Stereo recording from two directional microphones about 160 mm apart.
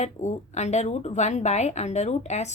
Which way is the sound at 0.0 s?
45° left (ahead or behind).